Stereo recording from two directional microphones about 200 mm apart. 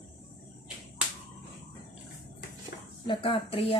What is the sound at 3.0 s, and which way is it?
Speech, 25° left (ahead or behind).